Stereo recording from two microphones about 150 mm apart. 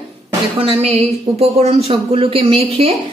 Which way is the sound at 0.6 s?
40° right (ahead or behind).